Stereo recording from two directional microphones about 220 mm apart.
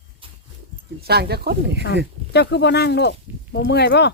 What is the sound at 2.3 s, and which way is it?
Speech, 50° left (ahead or behind).